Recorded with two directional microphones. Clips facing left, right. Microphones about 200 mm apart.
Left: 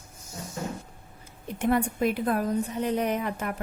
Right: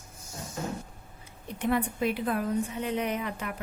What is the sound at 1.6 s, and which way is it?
A woman's voice, 45° left (ahead or behind).